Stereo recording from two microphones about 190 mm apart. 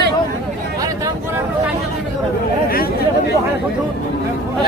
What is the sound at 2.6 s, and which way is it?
Speech, 50° left (ahead or behind).